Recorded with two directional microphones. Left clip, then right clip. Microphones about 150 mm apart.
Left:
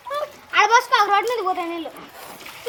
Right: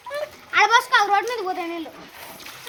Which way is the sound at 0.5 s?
35° right (ahead or behind).